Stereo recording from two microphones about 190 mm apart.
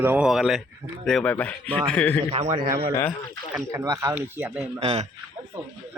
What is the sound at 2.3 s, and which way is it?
Speech, 35° right (ahead or behind).